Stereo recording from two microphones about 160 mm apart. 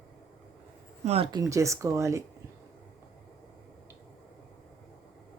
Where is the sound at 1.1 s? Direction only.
40° right (ahead or behind).